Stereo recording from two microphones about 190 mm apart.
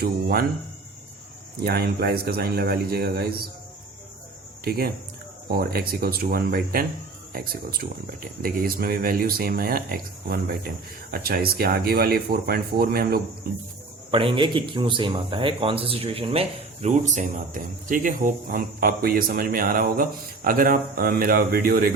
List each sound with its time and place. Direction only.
0.0 s a man's voice: 50° right (ahead or behind)
1.5 s speech: 55° right (ahead or behind)
4.6 s a man's voice: 55° right (ahead or behind)
14.1 s a man's voice: 30° right (ahead or behind); by 21.8 s 50° right (ahead or behind)